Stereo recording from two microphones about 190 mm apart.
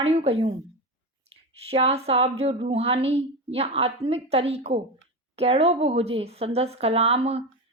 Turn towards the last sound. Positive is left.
turn(degrees=-30)  # may be behind; listen again after turning